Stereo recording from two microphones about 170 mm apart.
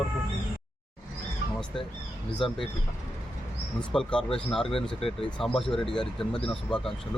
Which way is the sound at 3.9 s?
5° left (ahead or behind).